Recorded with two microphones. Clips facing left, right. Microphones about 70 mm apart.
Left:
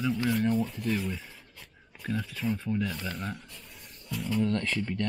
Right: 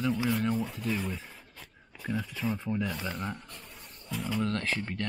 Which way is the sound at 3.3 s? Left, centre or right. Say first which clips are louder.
Right 1 dB; right.